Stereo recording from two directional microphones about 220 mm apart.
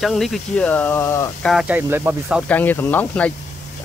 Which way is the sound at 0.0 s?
Centre (ahead or behind).